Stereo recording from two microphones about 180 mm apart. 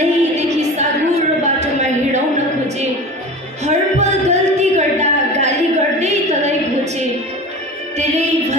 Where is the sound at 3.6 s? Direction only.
40° right (ahead or behind).